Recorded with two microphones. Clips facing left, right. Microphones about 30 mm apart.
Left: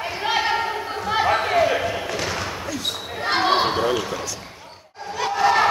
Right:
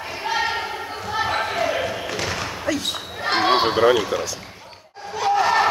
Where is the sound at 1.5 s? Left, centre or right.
Centre.